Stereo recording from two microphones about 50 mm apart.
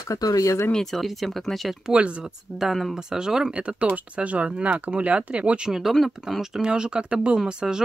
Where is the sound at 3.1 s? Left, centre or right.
Centre.